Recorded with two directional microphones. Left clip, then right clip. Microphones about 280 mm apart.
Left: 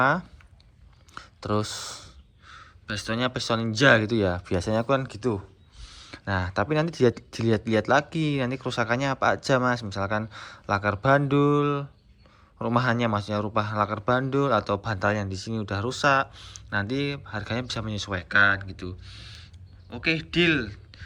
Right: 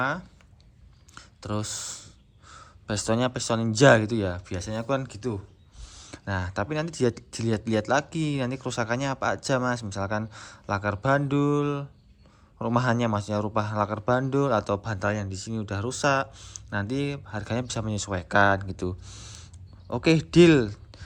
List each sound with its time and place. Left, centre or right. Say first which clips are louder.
0.0 s speech: left 6 dB; centre
1.1 s a sound: left 6 dB; centre
2.5 s a man's voice: right 1 dB; centre
5.8 s a man's voice: left 2 dB; centre